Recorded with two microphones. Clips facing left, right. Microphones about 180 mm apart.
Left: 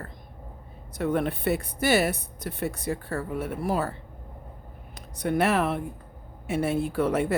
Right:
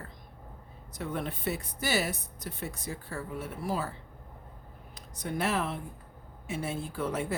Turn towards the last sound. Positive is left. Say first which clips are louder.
# left 8 dB
turn(degrees=65)  # may be behind; listen again after turning